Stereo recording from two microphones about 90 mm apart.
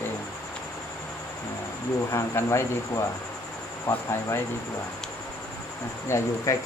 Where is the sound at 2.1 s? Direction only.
35° left (ahead or behind).